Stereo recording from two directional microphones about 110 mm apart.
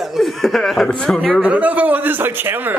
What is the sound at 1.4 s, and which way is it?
A man's voice, 15° right (ahead or behind).